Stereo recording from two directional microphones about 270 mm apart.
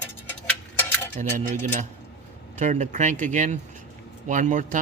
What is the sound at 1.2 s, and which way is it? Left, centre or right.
Speech, right.